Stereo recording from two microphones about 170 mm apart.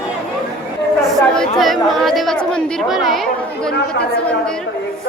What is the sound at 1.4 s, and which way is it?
Speech, centre (ahead or behind).